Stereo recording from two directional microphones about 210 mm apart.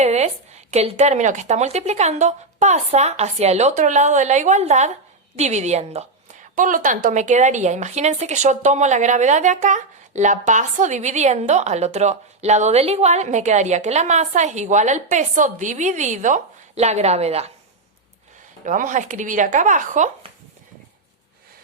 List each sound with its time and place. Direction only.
0.0 s a woman's voice: 30° right (ahead or behind)
18.6 s a woman's voice: 40° right (ahead or behind)